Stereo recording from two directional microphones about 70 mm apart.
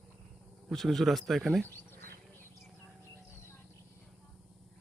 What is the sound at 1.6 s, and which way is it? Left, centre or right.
Speech, left.